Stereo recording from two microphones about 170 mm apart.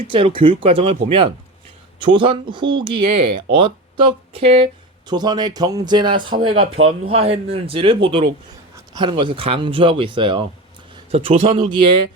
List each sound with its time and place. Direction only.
0.0 s speech: 30° right (ahead or behind)
2.0 s speech: 30° right (ahead or behind)
11.1 s speech: 40° right (ahead or behind)